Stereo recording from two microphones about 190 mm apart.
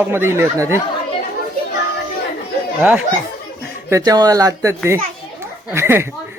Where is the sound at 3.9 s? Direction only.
20° right (ahead or behind).